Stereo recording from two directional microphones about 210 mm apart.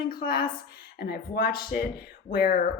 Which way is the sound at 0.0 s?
45° left (ahead or behind).